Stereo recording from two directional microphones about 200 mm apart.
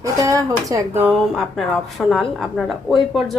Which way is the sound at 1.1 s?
Centre (ahead or behind).